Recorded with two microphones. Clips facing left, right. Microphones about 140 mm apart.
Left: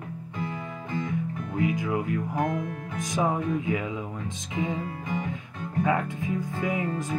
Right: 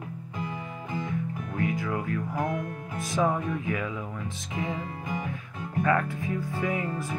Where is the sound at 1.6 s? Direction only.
20° left (ahead or behind).